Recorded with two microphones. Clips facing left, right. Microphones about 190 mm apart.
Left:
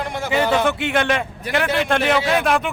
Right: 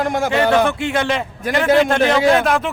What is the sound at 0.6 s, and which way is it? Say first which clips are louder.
Speech: even; centre (ahead or behind).